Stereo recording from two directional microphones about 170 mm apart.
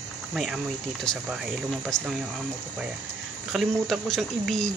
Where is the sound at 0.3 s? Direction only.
Centre (ahead or behind).